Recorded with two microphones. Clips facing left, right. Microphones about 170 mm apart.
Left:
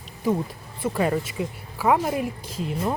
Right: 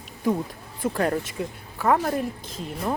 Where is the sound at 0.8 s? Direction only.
Centre (ahead or behind).